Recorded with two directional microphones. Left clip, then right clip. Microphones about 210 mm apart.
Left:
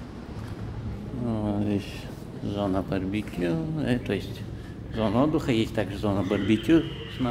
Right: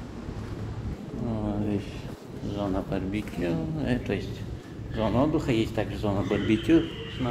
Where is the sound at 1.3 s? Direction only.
25° left (ahead or behind).